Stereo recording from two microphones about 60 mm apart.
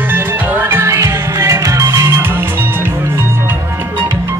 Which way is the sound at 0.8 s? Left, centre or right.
Right.